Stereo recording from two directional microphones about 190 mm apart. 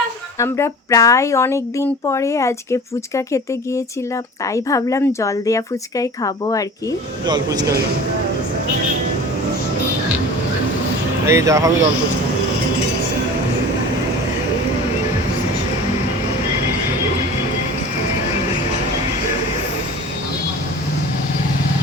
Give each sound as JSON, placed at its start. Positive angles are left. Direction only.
{"t": 0.3, "sound": "speech", "side_deg": 15}
{"t": 7.3, "sound": "a man's voice", "side_deg": -20}
{"t": 11.3, "sound": "speech", "side_deg": -15}